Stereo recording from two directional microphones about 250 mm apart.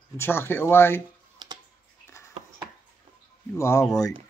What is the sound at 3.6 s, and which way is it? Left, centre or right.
Speech, centre.